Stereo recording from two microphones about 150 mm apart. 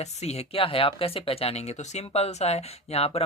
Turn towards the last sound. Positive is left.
turn(degrees=40)  # may be behind; listen again after turning